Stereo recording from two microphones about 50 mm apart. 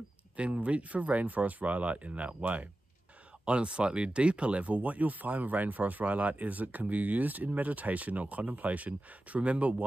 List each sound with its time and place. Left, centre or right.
0.4 s speech: right